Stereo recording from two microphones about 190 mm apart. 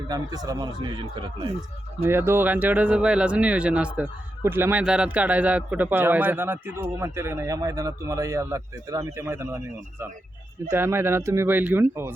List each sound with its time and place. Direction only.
0.1 s speech: 20° right (ahead or behind)
2.0 s speech: 10° right (ahead or behind)
10.7 s speech: 10° right (ahead or behind)